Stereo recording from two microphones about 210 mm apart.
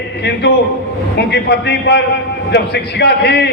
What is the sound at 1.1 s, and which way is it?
A man's voice, 50° left (ahead or behind).